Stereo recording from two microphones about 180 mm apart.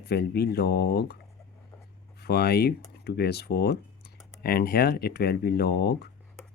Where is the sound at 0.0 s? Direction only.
65° left (ahead or behind).